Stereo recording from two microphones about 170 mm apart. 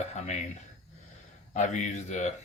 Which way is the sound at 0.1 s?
45° left (ahead or behind).